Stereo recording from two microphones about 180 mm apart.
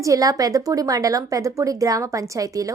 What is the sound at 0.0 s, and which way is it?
A woman's voice, 20° right (ahead or behind).